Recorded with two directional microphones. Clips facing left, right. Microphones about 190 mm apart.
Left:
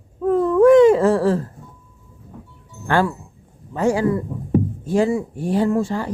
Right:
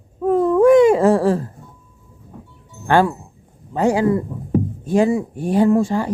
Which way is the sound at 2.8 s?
15° right (ahead or behind).